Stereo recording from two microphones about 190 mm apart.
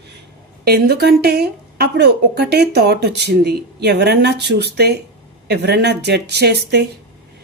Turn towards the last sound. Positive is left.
turn(degrees=-60)  # may be behind; listen again after turning